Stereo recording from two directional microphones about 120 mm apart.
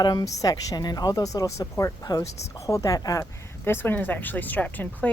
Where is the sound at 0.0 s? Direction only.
35° left (ahead or behind).